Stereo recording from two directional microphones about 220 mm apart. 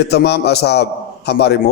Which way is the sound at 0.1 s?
50° left (ahead or behind).